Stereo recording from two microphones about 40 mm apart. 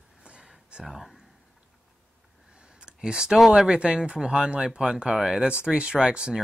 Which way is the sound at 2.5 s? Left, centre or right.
Right.